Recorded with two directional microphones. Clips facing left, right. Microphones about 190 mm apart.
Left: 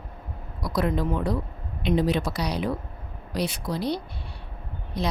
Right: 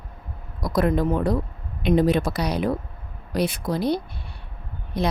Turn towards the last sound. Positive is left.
turn(degrees=-55)  # may be behind; listen again after turning